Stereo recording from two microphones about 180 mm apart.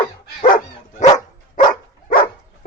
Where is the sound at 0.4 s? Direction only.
50° left (ahead or behind).